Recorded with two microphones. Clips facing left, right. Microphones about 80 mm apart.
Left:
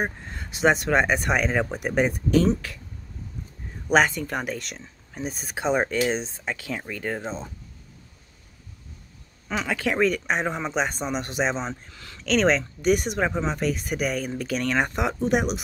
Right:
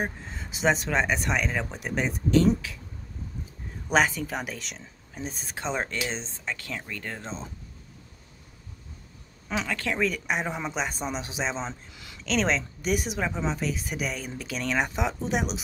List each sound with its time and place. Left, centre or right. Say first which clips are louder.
0.3 s speech: left 4 dB; centre
3.9 s speech: left 3 dB; centre
9.7 s speech: left 6 dB; centre
11.9 s a sound: left 2 dB; centre
12.3 s speech: left 5 dB; centre